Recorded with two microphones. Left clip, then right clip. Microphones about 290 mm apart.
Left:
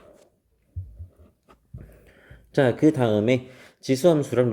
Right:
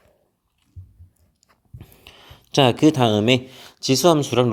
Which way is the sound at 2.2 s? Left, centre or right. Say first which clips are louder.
Right 4 dB; right.